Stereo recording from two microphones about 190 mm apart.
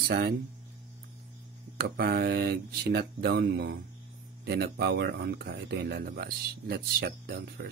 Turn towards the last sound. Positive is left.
turn(degrees=-60)  # may be behind; listen again after turning